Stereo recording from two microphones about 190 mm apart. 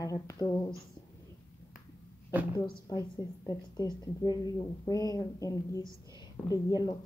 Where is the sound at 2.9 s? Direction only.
20° left (ahead or behind).